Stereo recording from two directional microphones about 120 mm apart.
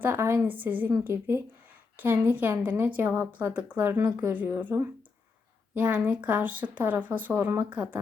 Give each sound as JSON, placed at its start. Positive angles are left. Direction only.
{"t": 0.0, "sound": "speech", "side_deg": -20}